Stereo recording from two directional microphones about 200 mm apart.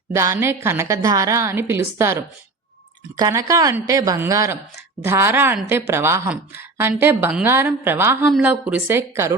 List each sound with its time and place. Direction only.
0.1 s a woman's voice: 15° right (ahead or behind)